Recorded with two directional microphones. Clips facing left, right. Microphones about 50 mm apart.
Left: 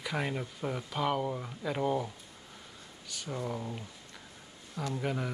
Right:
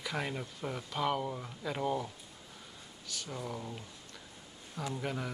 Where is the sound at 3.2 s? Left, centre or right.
Centre.